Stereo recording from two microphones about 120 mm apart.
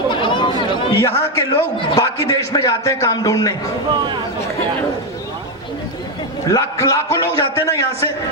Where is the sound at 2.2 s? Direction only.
35° left (ahead or behind).